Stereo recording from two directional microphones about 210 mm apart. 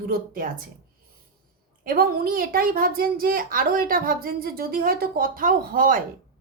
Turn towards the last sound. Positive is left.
turn(degrees=-40)  # may be behind; listen again after turning